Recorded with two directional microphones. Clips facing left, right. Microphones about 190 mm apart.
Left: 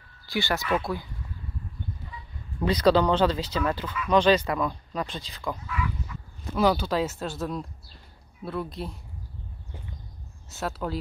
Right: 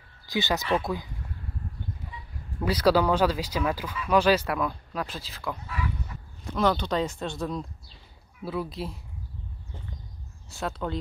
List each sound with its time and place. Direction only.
0.3 s speech: 20° right (ahead or behind)
2.6 s speech: 10° right (ahead or behind)
5.7 s pig: 35° right (ahead or behind)
6.5 s speech: 5° left (ahead or behind)
10.5 s speech: centre (ahead or behind)